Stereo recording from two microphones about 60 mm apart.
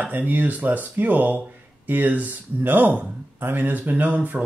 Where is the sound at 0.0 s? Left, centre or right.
Right.